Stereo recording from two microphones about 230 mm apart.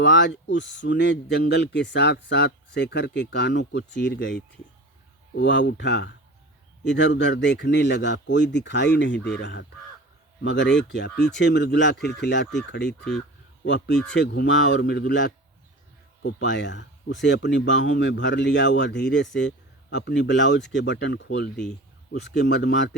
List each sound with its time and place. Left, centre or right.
0.0 s speech: left
13.0 s speech: centre
13.7 s speech: left
13.9 s speech: centre
14.2 s speech: left